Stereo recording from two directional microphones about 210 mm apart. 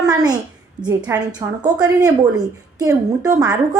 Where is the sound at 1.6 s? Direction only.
20° right (ahead or behind).